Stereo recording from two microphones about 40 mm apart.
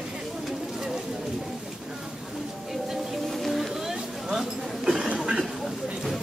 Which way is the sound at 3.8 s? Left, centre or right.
Centre.